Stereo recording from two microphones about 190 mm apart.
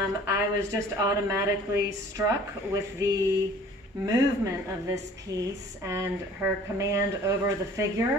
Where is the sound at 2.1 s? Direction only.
15° right (ahead or behind).